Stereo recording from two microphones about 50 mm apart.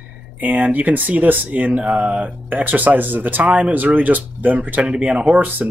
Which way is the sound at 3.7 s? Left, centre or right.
Right.